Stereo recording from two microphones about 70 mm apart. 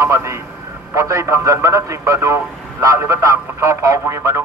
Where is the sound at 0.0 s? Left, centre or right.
Right.